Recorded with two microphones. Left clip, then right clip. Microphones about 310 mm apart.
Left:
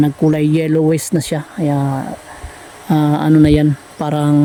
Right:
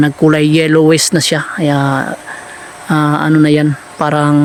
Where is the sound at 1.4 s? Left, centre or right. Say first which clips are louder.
Right 5 dB; right.